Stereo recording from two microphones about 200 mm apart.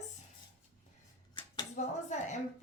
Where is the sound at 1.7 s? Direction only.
35° left (ahead or behind).